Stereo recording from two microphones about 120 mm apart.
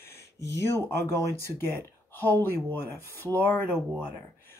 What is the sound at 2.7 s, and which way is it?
Speech, 20° left (ahead or behind).